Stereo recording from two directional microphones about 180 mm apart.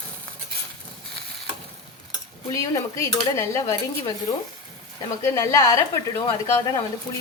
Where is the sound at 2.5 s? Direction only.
15° left (ahead or behind).